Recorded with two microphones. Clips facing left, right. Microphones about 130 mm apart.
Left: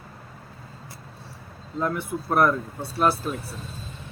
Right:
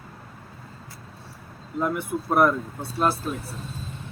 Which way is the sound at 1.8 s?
10° right (ahead or behind).